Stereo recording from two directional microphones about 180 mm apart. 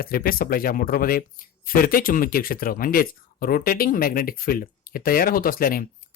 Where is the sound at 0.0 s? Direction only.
55° left (ahead or behind).